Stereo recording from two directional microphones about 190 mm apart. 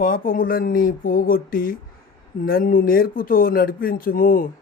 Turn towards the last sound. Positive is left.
turn(degrees=50)  # may be behind; listen again after turning